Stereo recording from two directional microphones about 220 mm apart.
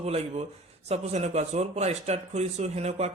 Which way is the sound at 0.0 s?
30° right (ahead or behind).